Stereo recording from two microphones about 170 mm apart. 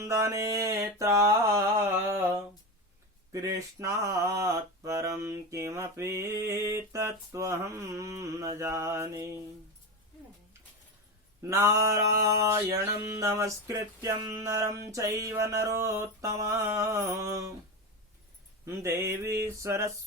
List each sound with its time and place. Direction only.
0.0 s mantra: 20° right (ahead or behind)
11.4 s mantra: 15° right (ahead or behind)
18.6 s mantra: 15° right (ahead or behind)